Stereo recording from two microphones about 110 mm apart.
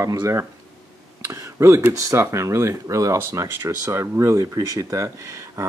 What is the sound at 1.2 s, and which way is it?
Speech, 20° right (ahead or behind).